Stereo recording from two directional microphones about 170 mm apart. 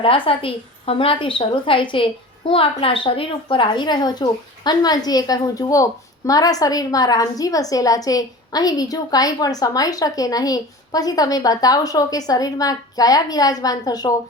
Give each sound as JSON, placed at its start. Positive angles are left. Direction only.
{"t": 0.0, "sound": "a woman's voice", "side_deg": 30}